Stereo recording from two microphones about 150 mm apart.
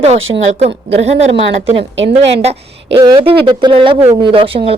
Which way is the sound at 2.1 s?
45° right (ahead or behind).